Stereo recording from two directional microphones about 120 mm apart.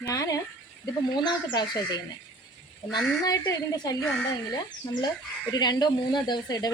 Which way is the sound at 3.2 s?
30° left (ahead or behind).